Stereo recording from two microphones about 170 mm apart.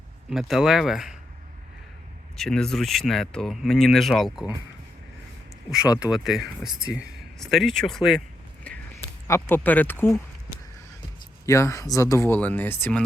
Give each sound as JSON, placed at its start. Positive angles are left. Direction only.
{"t": 0.3, "sound": "speech", "side_deg": 0}
{"t": 2.4, "sound": "speech", "side_deg": 5}
{"t": 6.2, "sound": "speech", "side_deg": -5}
{"t": 11.4, "sound": "speech", "side_deg": 15}